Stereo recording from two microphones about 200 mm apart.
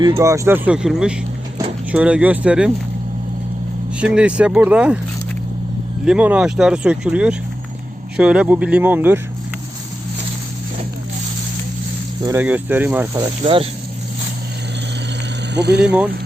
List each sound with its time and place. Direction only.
0.2 s speech: 15° right (ahead or behind)
4.0 s speech: 5° right (ahead or behind)
6.1 s speech: 5° right (ahead or behind)
12.2 s speech: 10° right (ahead or behind)
13.2 s speech: 25° right (ahead or behind)
15.5 s speech: 55° right (ahead or behind)